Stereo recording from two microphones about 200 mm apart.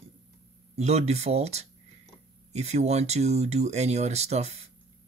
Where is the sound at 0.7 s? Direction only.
35° right (ahead or behind).